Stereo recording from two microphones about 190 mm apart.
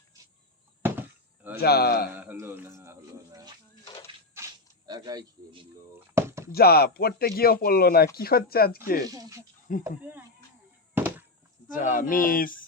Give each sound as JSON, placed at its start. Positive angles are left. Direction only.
{"t": 0.8, "sound": "chop", "side_deg": -10}
{"t": 1.6, "sound": "a man's voice", "side_deg": 55}
{"t": 2.1, "sound": "speech", "side_deg": -10}
{"t": 4.4, "sound": "a sound", "side_deg": -20}
{"t": 6.5, "sound": "speech", "side_deg": 55}
{"t": 9.0, "sound": "speech", "side_deg": -20}
{"t": 10.9, "sound": "a sound", "side_deg": -10}
{"t": 11.7, "sound": "speech", "side_deg": 45}